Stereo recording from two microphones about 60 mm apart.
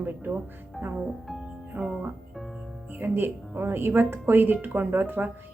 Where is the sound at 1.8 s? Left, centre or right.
Centre.